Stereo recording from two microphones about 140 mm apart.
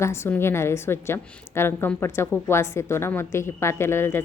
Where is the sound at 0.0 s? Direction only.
20° left (ahead or behind).